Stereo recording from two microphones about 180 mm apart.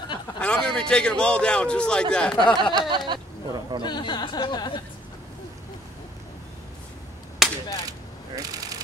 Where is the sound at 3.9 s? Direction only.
25° left (ahead or behind).